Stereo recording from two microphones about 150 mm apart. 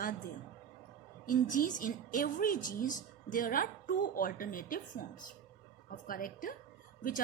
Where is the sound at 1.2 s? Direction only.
65° left (ahead or behind).